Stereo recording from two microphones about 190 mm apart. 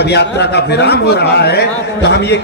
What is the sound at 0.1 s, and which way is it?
A man's voice, 60° left (ahead or behind).